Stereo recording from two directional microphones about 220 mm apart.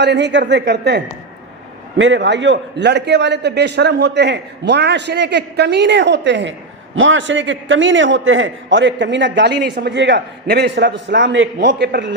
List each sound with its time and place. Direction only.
0.0 s a man's voice: 50° right (ahead or behind)